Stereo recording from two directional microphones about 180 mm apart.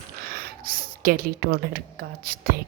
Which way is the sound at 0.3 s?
55° right (ahead or behind).